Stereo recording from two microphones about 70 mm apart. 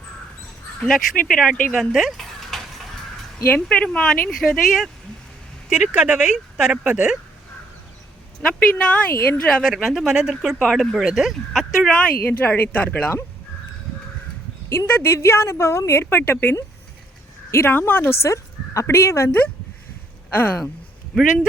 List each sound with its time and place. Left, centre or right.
0.8 s speech: centre
1.7 s a sound: centre
3.5 s speech: centre
5.6 s speech: centre
8.4 s speech: centre
8.8 s speech: left
9.7 s speech: centre
10.6 s speech: centre
12.2 s speech: left
14.8 s a woman's voice: left
17.7 s a woman's voice: left
18.3 s speech: left
20.3 s speech: left